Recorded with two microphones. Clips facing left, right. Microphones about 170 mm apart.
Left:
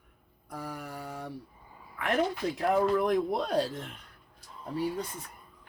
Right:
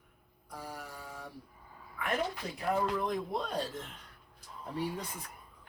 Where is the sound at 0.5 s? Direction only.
60° left (ahead or behind).